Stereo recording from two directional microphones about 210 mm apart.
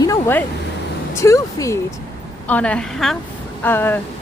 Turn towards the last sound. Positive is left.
turn(degrees=10)  # may be behind; listen again after turning